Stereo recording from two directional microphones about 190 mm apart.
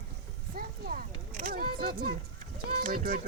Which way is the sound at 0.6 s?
50° right (ahead or behind).